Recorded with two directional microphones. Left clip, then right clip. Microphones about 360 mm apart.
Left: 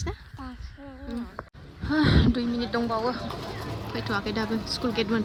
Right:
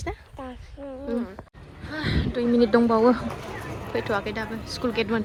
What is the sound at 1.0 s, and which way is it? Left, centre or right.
Insect, right.